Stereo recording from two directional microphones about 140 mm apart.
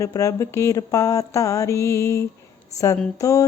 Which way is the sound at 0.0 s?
25° left (ahead or behind).